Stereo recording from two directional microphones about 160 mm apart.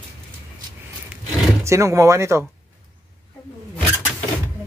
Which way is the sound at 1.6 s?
20° right (ahead or behind).